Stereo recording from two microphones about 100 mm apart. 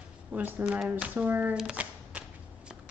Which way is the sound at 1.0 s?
15° right (ahead or behind).